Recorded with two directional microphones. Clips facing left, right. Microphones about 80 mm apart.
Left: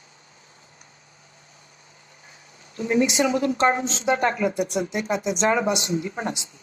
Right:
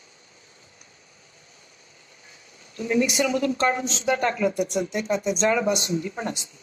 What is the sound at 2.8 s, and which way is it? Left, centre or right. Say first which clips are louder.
A woman's voice: left 2 dB; left.